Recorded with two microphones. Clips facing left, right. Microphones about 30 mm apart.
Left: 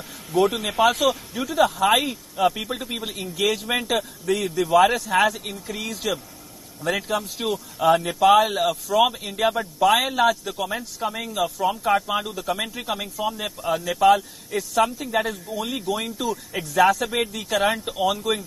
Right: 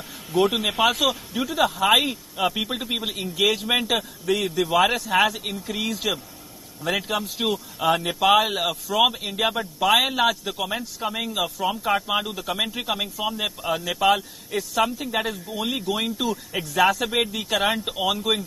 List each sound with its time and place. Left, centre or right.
0.3 s a man's voice: centre